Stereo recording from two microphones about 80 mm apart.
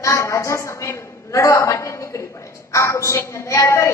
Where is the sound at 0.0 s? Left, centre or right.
Left.